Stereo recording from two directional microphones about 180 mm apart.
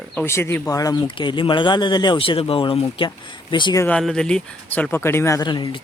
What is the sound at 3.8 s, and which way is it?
Speech, 5° left (ahead or behind).